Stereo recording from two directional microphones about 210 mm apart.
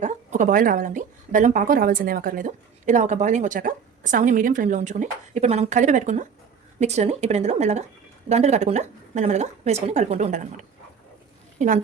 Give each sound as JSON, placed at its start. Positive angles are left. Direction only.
{"t": 0.0, "sound": "a woman's voice", "side_deg": -35}